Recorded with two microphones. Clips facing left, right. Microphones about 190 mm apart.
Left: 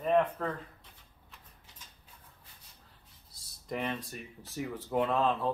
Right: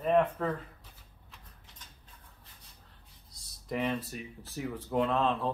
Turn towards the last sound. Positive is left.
turn(degrees=0)  # may be behind; listen again after turning